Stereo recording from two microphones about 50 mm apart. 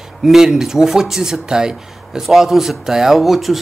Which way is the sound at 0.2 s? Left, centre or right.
Centre.